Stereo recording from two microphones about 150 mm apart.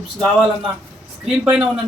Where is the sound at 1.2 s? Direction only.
5° right (ahead or behind).